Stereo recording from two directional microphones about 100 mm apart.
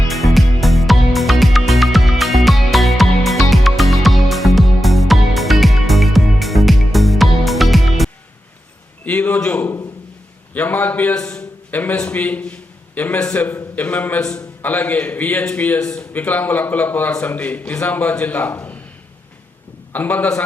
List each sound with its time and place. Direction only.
0.1 s music: centre (ahead or behind)
9.0 s a sound: 15° left (ahead or behind)
10.5 s a man's voice: 15° left (ahead or behind)
19.9 s a man's voice: 15° left (ahead or behind)